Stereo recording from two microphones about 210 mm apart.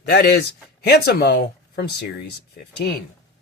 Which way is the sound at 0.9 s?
50° left (ahead or behind).